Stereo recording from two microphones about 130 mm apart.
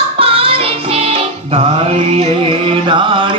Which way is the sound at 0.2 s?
45° right (ahead or behind).